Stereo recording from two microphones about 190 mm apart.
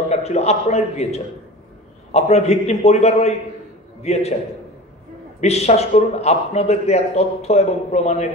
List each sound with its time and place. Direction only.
0.1 s a man's voice: 35° left (ahead or behind)
5.4 s a man's voice: 35° left (ahead or behind)